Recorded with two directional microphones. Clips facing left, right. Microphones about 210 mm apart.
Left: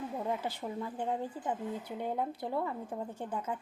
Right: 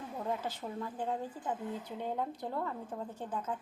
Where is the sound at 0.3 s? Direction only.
10° left (ahead or behind).